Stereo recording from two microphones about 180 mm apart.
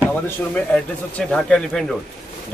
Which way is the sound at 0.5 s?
5° left (ahead or behind).